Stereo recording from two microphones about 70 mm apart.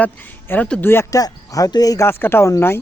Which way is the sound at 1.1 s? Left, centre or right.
Left.